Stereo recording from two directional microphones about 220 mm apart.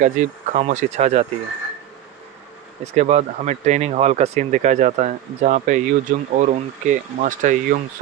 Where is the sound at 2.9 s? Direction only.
30° right (ahead or behind).